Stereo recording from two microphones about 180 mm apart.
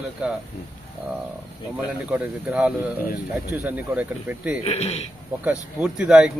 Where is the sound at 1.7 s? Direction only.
5° right (ahead or behind).